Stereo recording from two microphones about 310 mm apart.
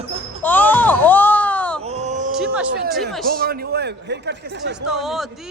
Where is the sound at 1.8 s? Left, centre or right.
Right.